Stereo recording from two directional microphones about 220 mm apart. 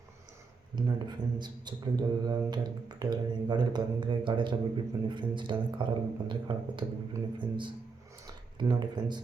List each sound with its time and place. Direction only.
0.8 s speech: 20° right (ahead or behind)